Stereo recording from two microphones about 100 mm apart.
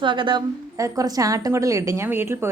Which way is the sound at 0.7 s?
35° right (ahead or behind).